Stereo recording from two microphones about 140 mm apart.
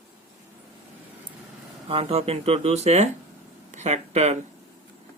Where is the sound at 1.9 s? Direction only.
45° right (ahead or behind).